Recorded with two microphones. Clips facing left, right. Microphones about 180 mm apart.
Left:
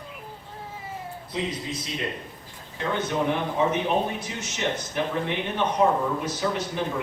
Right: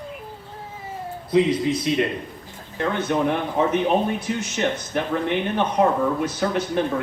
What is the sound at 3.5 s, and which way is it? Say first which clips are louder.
Speech: right 4 dB; 55° right (ahead or behind).